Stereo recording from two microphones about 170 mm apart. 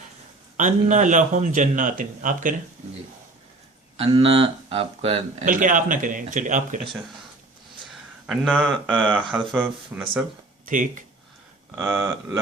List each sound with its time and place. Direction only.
0.5 s a man's voice: 45° right (ahead or behind)
3.9 s speech: 35° right (ahead or behind)
5.5 s a man's voice: 50° right (ahead or behind)
8.3 s speech: 5° left (ahead or behind)
11.8 s speech: 10° right (ahead or behind)